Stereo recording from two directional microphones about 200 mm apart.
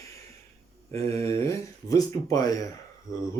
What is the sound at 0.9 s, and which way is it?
Speech, 15° left (ahead or behind).